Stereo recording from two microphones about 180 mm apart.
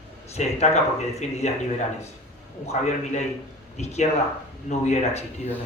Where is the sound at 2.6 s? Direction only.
35° left (ahead or behind).